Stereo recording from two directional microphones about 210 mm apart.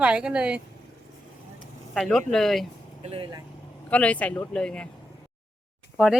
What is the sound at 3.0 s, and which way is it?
Speech, 30° right (ahead or behind).